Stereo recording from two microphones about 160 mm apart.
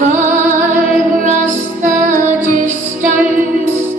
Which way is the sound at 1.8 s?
50° right (ahead or behind).